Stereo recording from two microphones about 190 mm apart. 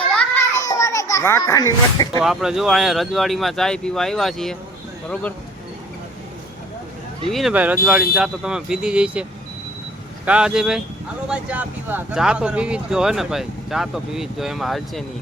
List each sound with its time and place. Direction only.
0.1 s children playing: 5° left (ahead or behind)
0.6 s a child's voice: 15° left (ahead or behind)
2.2 s speech: 5° right (ahead or behind)
7.3 s speech: centre (ahead or behind)
10.2 s speech: 5° right (ahead or behind)